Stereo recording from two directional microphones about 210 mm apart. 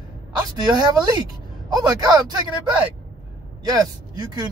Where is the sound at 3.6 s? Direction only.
20° right (ahead or behind).